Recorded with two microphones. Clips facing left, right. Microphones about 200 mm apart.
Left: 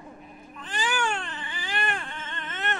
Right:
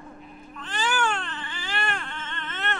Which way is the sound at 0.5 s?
15° left (ahead or behind).